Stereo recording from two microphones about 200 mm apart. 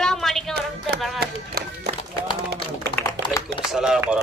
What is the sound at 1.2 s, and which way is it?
Run, 50° right (ahead or behind).